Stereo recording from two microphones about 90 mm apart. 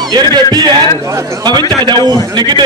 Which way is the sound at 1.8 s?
55° right (ahead or behind).